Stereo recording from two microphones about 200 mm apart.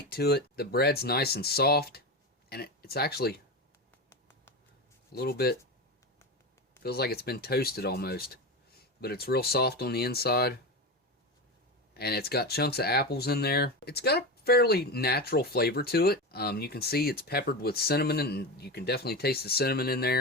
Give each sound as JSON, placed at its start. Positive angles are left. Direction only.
{"t": 0.1, "sound": "speech", "side_deg": 55}
{"t": 5.1, "sound": "speech", "side_deg": 50}
{"t": 6.8, "sound": "speech", "side_deg": 50}
{"t": 11.9, "sound": "speech", "side_deg": 50}